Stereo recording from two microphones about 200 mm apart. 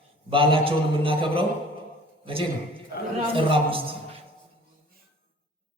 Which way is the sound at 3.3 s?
25° right (ahead or behind).